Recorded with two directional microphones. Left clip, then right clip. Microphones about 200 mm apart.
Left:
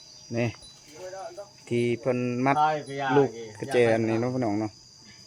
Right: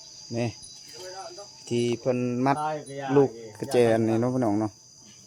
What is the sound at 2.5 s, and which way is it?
Speech, 45° left (ahead or behind).